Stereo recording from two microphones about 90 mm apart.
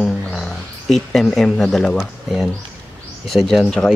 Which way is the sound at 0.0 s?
10° left (ahead or behind).